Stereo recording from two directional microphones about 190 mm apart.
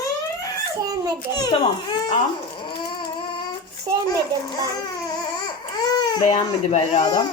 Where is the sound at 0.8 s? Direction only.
20° right (ahead or behind).